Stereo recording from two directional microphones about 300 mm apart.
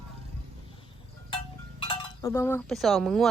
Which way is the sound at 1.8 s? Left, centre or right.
Centre.